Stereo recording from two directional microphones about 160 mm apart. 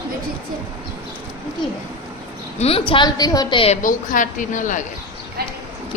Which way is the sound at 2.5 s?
40° left (ahead or behind).